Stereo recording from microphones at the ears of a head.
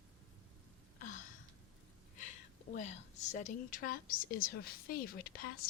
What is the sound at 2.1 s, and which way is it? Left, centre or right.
A woman's voice, left.